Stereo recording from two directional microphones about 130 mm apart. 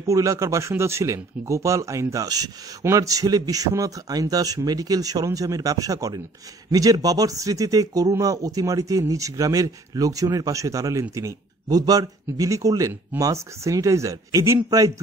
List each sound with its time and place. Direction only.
0.0 s speech: 25° right (ahead or behind)